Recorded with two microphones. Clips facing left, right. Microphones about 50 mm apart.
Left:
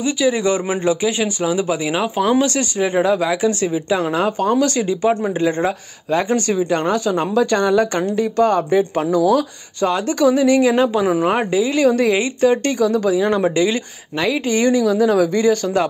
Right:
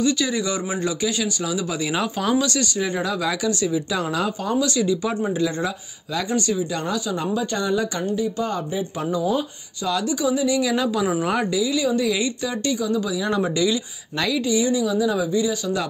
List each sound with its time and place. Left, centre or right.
0.0 s a man's voice: left
4.4 s a woman's voice: left
7.3 s speech: left
9.8 s a woman's voice: left
10.2 s a woman's voice: left